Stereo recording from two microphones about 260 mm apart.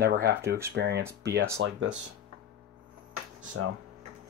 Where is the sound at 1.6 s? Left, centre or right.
Right.